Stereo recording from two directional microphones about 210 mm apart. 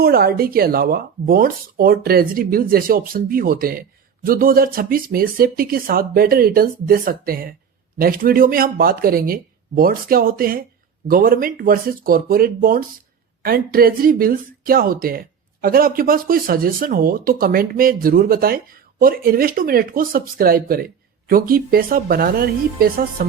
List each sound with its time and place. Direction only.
0.0 s speech: 45° right (ahead or behind)